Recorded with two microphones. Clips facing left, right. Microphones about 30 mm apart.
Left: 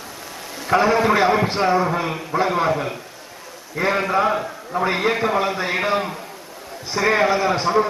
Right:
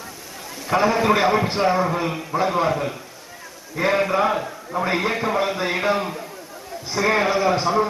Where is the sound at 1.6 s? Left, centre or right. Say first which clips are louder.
Left 1 dB; centre.